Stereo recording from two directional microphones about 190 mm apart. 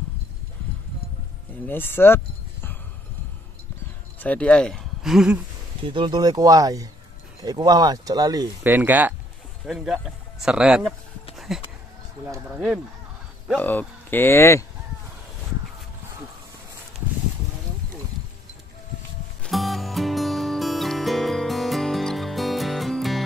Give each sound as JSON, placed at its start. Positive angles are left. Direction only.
{"t": 1.7, "sound": "speech", "side_deg": 10}
{"t": 4.2, "sound": "speech", "side_deg": 5}
{"t": 5.9, "sound": "speech", "side_deg": -25}
{"t": 11.3, "sound": "a sound", "side_deg": 0}
{"t": 12.3, "sound": "speech", "side_deg": -5}
{"t": 13.6, "sound": "speech", "side_deg": 10}
{"t": 19.4, "sound": "music", "side_deg": 0}